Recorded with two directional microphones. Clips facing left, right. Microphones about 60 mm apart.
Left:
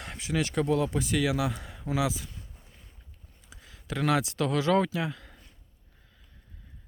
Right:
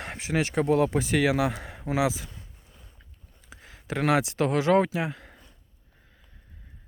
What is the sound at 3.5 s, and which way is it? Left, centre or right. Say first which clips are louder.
Speech: right 3 dB; right.